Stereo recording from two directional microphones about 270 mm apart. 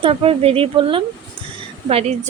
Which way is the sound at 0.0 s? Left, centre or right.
Right.